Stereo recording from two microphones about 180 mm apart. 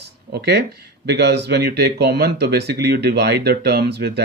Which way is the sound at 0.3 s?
65° right (ahead or behind).